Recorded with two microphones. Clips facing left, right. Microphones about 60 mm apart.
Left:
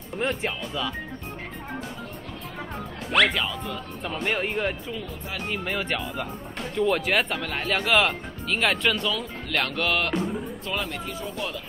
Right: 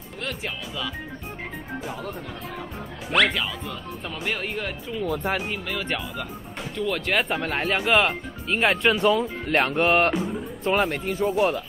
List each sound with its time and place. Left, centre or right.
0.2 s speech: centre
3.1 s speech: centre
5.0 s speech: right
6.7 s speech: centre
7.3 s speech: right
7.7 s speech: centre
9.5 s speech: right
10.1 s speech: centre
10.8 s speech: right
11.2 s speech: right